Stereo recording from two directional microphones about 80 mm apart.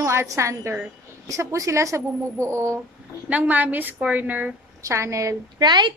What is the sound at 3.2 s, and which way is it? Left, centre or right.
A woman's voice, centre.